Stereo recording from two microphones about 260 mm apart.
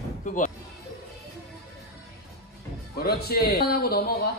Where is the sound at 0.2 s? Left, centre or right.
Left.